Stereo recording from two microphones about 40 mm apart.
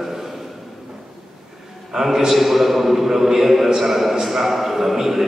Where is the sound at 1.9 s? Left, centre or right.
Centre.